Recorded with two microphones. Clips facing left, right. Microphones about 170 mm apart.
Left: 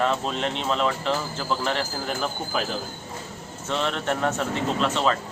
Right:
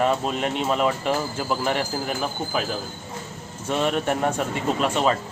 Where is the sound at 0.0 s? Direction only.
10° right (ahead or behind).